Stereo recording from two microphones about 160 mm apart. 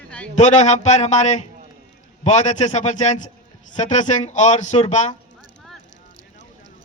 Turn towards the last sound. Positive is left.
turn(degrees=45)  # may be behind; listen again after turning